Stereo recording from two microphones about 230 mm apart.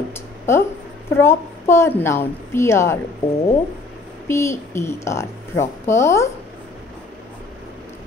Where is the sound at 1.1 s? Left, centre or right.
Centre.